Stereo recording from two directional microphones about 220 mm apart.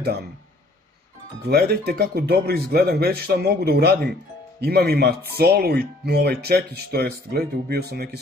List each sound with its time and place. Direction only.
1.4 s speech: 45° right (ahead or behind)